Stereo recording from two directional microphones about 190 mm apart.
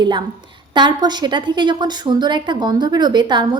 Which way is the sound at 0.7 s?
25° right (ahead or behind).